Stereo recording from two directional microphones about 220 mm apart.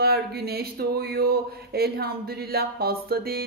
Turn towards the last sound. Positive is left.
turn(degrees=-45)  # may be behind; listen again after turning